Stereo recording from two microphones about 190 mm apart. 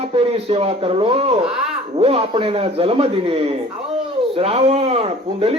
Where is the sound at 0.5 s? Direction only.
30° right (ahead or behind).